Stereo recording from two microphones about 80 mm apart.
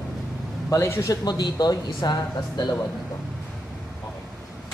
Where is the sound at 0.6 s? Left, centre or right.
Left.